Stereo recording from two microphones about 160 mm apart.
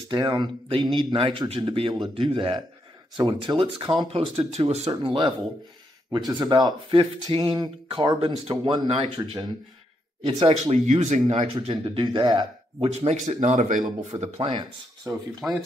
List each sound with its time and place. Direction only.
0.1 s speech: 25° right (ahead or behind)
6.1 s speech: 25° right (ahead or behind)
10.7 s speech: 45° right (ahead or behind)
12.9 s speech: 45° right (ahead or behind)
14.1 s speech: 40° right (ahead or behind)
14.5 s speech: 25° right (ahead or behind)
15.4 s speech: 5° right (ahead or behind)